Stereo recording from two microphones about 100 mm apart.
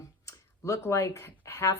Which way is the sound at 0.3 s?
30° left (ahead or behind).